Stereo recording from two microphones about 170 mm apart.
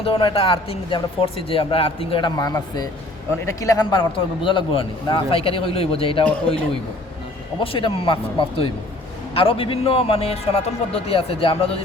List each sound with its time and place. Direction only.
0.0 s speech: 30° left (ahead or behind)
7.6 s speech: 30° left (ahead or behind)